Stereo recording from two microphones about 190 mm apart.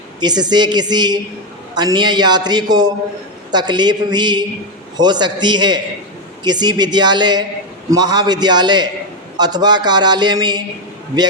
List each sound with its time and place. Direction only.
0.2 s a man's voice: 20° right (ahead or behind)